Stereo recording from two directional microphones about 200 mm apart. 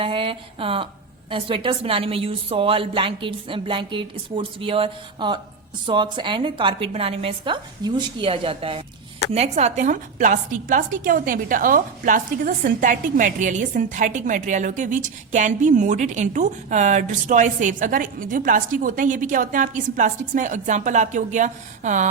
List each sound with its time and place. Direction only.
0.0 s a woman's voice: 25° right (ahead or behind)